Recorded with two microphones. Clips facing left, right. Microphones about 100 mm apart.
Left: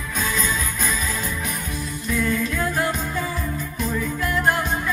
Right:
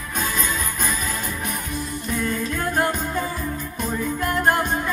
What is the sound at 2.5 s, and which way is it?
Music, 50° right (ahead or behind).